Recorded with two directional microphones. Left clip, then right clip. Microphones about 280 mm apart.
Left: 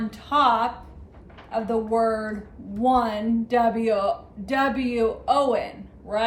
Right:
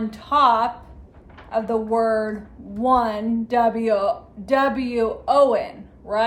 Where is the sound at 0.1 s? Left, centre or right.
Centre.